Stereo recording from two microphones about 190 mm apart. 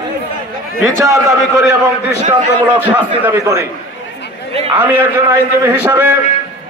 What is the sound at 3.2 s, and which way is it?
Speech, 15° right (ahead or behind).